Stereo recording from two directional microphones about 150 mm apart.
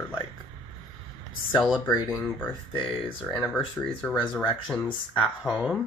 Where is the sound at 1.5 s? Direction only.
Centre (ahead or behind).